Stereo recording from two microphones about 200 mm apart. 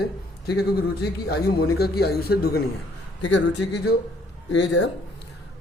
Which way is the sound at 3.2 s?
60° left (ahead or behind).